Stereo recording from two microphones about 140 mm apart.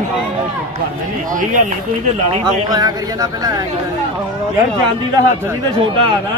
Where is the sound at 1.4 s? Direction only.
65° right (ahead or behind).